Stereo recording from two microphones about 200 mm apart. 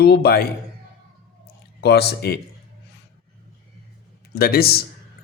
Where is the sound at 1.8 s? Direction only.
55° left (ahead or behind).